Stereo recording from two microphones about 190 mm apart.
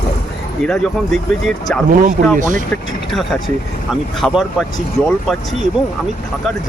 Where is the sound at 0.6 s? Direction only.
Centre (ahead or behind).